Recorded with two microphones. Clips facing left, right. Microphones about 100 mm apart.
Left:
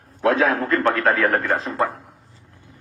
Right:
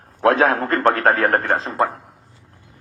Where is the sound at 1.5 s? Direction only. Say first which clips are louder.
Right 2 dB; 30° right (ahead or behind).